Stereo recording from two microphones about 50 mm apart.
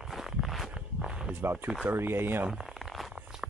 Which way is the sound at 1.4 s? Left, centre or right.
Right.